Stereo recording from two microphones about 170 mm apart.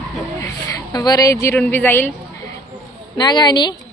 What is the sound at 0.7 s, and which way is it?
Speech, 25° left (ahead or behind).